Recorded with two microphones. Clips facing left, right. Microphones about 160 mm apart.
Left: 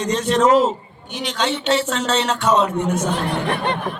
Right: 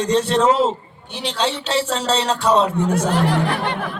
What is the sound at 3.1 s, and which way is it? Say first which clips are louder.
Speech: right 3 dB; 90° right.